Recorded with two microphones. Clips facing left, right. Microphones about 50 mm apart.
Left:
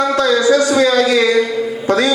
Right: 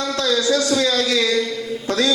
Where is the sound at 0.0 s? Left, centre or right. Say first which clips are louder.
Left 7 dB; left.